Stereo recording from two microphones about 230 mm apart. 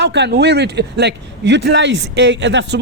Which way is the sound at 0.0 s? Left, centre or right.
Right.